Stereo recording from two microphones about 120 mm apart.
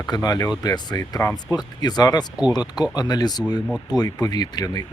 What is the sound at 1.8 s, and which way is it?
Speech, 35° left (ahead or behind).